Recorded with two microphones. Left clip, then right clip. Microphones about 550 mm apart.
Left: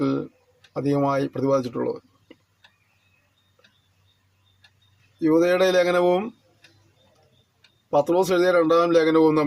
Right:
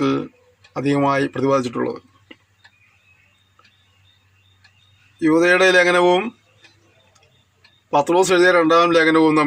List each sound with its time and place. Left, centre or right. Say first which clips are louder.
0.0 s speech: right 4 dB; left
5.2 s a man's voice: right 4 dB; left
7.9 s a man's voice: right 4 dB; left